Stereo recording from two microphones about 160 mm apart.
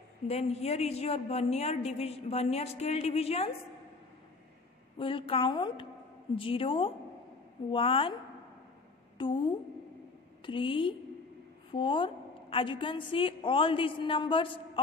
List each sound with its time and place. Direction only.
0.3 s a woman's voice: 45° left (ahead or behind)
4.9 s a woman's voice: 35° left (ahead or behind)
9.2 s a woman's voice: 30° left (ahead or behind)